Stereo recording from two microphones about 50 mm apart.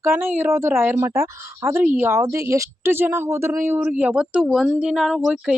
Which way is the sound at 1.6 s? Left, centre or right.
Right.